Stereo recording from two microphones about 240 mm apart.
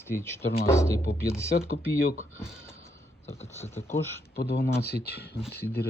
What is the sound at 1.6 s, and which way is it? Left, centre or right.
Speech, left.